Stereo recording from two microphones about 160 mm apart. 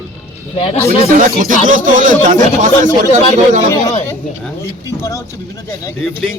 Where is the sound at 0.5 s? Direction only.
40° left (ahead or behind).